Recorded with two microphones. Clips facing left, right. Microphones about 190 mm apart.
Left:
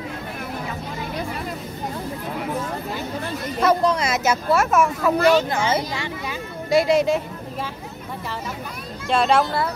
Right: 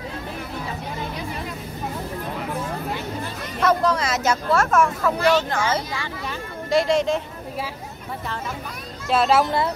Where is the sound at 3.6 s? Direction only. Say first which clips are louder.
Left 1 dB; 15° left (ahead or behind).